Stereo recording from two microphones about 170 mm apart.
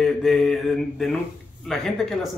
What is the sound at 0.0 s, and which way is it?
Speech, centre (ahead or behind).